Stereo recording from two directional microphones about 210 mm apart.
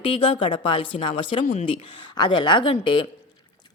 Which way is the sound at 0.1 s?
25° left (ahead or behind).